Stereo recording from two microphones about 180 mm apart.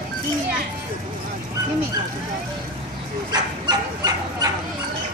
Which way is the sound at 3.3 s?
20° right (ahead or behind).